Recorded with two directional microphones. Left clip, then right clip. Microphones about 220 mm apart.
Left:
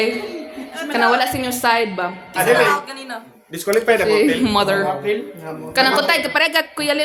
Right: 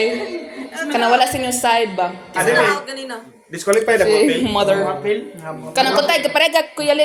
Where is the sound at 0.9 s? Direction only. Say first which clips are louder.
Right 1 dB; 10° left (ahead or behind).